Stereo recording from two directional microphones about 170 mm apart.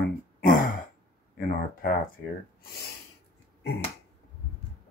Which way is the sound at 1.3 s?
60° left (ahead or behind).